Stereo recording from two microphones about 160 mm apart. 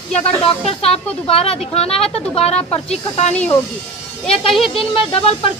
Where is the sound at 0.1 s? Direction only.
35° left (ahead or behind).